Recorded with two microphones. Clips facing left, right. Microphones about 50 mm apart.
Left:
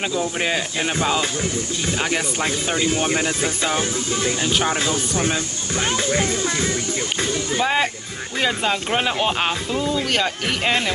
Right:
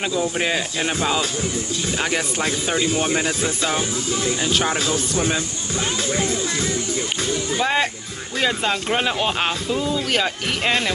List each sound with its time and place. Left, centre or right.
0.1 s speech: centre
2.0 s speech: centre
7.6 s speech: centre